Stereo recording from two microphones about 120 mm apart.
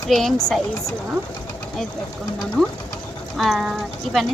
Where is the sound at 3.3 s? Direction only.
Centre (ahead or behind).